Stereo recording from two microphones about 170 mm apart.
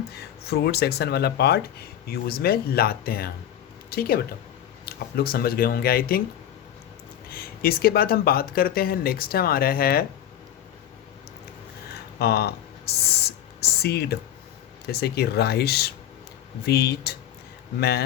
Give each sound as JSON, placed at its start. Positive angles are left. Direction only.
{"t": 0.1, "sound": "speech", "side_deg": 70}
{"t": 7.3, "sound": "speech", "side_deg": 60}
{"t": 12.2, "sound": "speech", "side_deg": 70}